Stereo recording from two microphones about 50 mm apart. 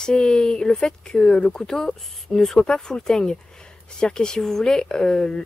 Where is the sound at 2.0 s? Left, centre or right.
Centre.